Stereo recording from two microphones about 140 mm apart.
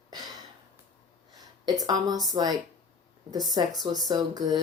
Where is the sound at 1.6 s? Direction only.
25° right (ahead or behind).